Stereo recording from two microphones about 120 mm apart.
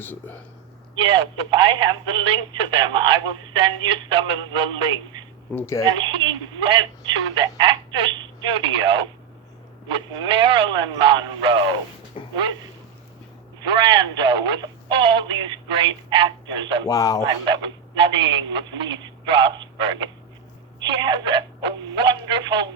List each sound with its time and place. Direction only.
0.0 s speech: 15° left (ahead or behind)
0.9 s speech: 45° right (ahead or behind)
5.5 s speech: 20° left (ahead or behind)
6.0 s speech: 40° right (ahead or behind)
12.1 s a sound: 50° left (ahead or behind)
13.6 s speech: 40° right (ahead or behind)
16.9 s speech: 30° left (ahead or behind)
17.2 s speech: 40° right (ahead or behind)